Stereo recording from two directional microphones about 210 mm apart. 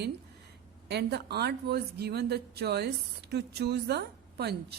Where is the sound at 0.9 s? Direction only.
50° right (ahead or behind).